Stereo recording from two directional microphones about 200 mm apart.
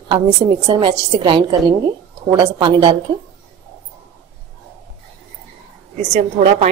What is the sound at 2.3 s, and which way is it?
Speech, 20° right (ahead or behind).